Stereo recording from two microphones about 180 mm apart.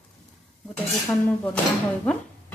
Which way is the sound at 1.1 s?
10° left (ahead or behind).